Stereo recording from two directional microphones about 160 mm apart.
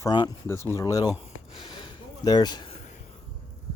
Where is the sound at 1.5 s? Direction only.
30° left (ahead or behind).